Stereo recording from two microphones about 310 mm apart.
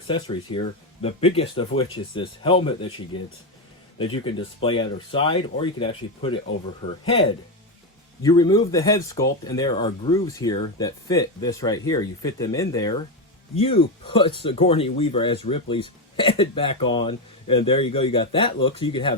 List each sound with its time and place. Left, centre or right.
0.1 s speech: centre
3.9 s speech: centre